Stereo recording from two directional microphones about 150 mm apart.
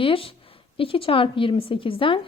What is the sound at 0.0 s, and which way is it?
A woman's voice, 35° left (ahead or behind).